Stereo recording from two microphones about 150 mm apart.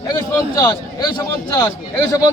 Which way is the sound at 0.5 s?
25° left (ahead or behind).